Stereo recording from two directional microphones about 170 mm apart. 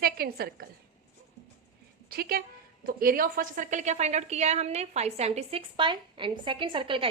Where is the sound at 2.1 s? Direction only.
65° right (ahead or behind).